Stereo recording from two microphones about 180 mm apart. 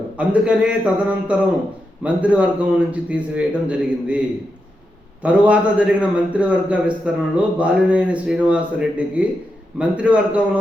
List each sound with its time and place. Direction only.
0.2 s a man's voice: 5° right (ahead or behind)
5.2 s a man's voice: 5° right (ahead or behind)